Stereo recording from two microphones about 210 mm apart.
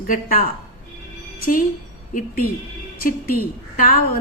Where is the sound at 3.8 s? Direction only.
40° left (ahead or behind).